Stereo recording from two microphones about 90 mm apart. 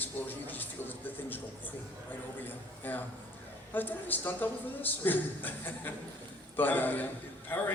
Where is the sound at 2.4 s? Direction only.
20° left (ahead or behind).